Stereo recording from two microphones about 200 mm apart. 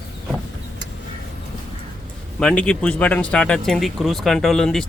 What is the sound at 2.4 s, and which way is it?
Speech, 5° left (ahead or behind).